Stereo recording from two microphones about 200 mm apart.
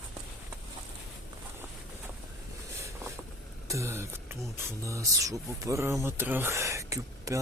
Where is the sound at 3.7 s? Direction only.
15° right (ahead or behind).